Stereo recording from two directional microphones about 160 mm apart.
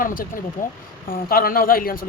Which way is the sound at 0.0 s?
60° left (ahead or behind).